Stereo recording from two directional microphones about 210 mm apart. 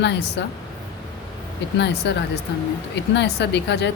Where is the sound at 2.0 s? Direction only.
55° left (ahead or behind).